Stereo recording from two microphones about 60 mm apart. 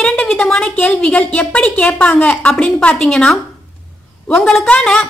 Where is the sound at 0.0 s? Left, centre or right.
Centre.